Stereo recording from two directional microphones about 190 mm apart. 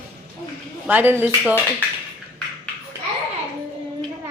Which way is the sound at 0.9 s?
10° right (ahead or behind).